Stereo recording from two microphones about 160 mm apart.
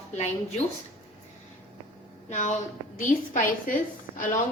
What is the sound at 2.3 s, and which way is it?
A woman's voice, 50° left (ahead or behind).